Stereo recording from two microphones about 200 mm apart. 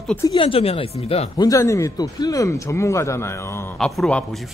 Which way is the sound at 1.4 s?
15° left (ahead or behind).